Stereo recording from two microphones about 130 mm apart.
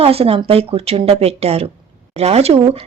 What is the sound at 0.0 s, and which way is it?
Speech, 50° right (ahead or behind).